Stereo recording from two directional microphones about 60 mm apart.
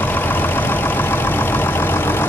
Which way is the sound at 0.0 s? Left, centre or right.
Left.